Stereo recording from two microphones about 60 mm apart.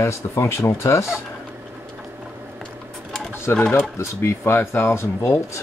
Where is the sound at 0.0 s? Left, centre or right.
Left.